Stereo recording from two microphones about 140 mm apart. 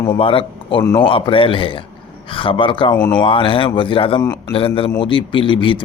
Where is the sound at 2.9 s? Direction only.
15° left (ahead or behind).